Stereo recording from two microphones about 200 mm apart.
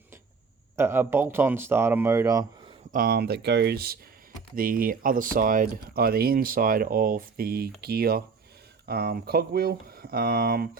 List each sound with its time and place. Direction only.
0.8 s speech: 10° right (ahead or behind)
2.9 s speech: 45° right (ahead or behind)